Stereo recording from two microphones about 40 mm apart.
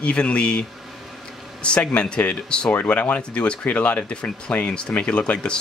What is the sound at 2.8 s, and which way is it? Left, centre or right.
Speech, left.